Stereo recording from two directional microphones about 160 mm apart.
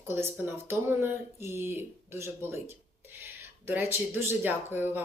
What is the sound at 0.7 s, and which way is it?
Speech, 15° right (ahead or behind).